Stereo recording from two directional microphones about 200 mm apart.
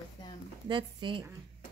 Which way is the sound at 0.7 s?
25° right (ahead or behind).